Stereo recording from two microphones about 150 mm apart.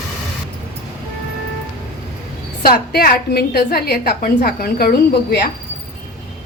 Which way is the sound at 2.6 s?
80° left.